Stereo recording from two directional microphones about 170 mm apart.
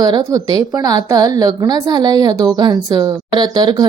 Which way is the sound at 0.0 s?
20° right (ahead or behind).